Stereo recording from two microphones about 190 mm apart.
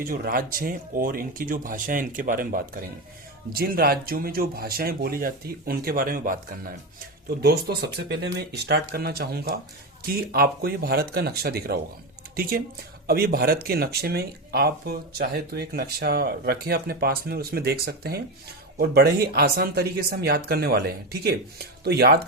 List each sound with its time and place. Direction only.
0.0 s speech: 50° right (ahead or behind)
7.3 s speech: 60° right (ahead or behind)